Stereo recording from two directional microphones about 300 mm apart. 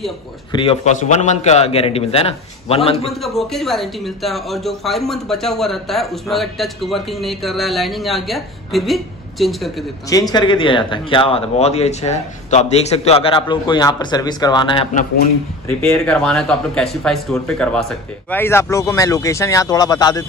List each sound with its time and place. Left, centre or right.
0.5 s a man's voice: centre
3.1 s speech: centre
10.0 s speech: centre
15.9 s speech: centre